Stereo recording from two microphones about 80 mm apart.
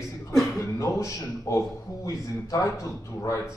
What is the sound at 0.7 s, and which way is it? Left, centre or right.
A man's voice, left.